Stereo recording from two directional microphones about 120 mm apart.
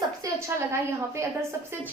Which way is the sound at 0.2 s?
25° right (ahead or behind).